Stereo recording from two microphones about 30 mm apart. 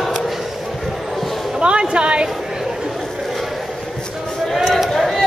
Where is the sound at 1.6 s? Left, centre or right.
Right.